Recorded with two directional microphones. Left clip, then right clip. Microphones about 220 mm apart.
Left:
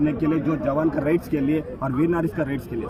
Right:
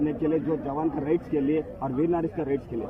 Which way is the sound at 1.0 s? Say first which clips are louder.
Left 3 dB; 5° right (ahead or behind).